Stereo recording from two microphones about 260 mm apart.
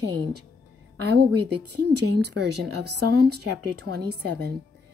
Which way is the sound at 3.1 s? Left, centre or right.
Right.